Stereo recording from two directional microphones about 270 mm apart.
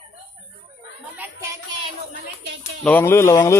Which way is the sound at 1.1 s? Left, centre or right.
Centre.